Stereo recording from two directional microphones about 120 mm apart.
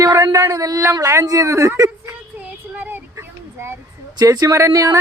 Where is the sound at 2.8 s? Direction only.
15° right (ahead or behind).